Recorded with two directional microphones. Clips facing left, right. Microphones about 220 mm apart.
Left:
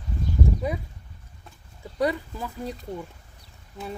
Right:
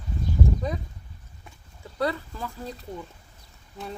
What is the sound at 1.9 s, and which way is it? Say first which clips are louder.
Speech: left 2 dB; 15° left (ahead or behind).